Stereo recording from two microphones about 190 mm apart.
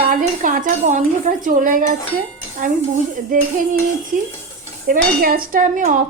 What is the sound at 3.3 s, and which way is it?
Dishes, 45° right (ahead or behind).